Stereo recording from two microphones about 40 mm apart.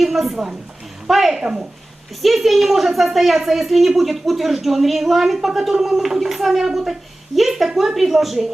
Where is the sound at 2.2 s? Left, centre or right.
Centre.